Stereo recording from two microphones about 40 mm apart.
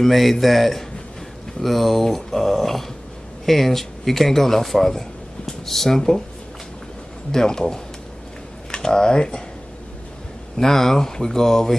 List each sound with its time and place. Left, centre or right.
0.0 s a man's voice: centre
7.3 s speech: centre
10.6 s speech: centre